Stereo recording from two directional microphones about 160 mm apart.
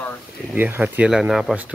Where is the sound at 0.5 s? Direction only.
10° right (ahead or behind).